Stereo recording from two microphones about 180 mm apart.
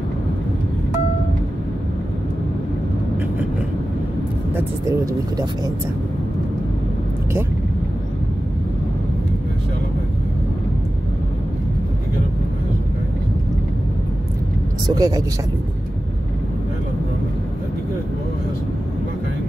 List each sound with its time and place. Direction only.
4.6 s speech: 20° right (ahead or behind)
15.0 s speech: 20° right (ahead or behind)